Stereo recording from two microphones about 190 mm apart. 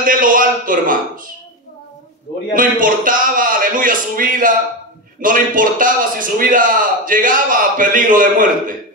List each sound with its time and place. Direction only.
0.0 s a man's voice: 45° right (ahead or behind)
2.5 s a man's voice: 45° right (ahead or behind)